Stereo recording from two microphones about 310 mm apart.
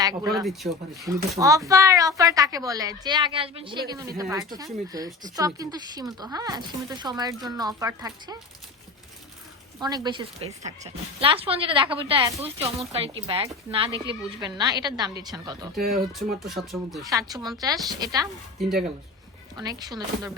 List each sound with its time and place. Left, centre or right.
0.0 s speech: centre
0.4 s speech: centre
9.8 s speech: centre
15.9 s speech: centre
17.1 s speech: centre
19.5 s speech: centre